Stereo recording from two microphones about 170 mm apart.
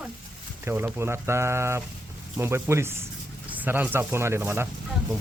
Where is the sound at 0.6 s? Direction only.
10° right (ahead or behind).